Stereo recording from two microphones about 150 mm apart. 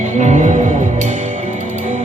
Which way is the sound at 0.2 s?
50° right (ahead or behind).